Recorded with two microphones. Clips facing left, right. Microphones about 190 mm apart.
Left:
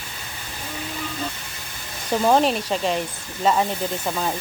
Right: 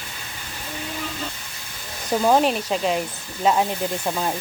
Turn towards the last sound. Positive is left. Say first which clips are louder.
# right 1 dB
turn(degrees=-5)  # may be behind; listen again after turning